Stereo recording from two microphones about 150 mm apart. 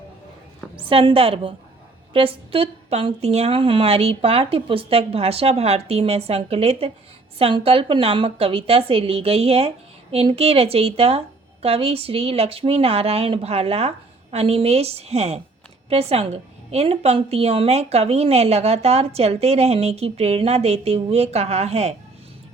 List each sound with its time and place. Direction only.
0.8 s a woman's voice: 35° right (ahead or behind)